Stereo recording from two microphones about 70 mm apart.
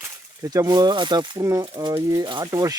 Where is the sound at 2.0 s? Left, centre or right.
Right.